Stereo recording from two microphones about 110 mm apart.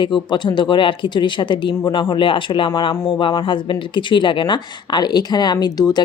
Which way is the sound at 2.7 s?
35° left (ahead or behind).